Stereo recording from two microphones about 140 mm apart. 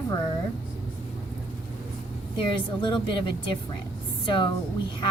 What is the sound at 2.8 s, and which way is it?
A woman's voice, 35° left (ahead or behind).